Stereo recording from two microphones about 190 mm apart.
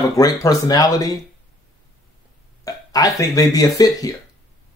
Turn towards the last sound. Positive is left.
turn(degrees=20)  # may be behind; listen again after turning